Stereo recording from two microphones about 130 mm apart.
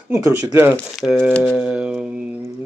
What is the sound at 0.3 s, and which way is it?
Speech, 20° right (ahead or behind).